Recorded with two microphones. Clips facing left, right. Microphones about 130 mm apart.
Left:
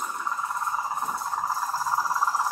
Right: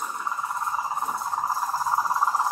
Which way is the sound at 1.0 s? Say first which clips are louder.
Right 1 dB; 15° right (ahead or behind).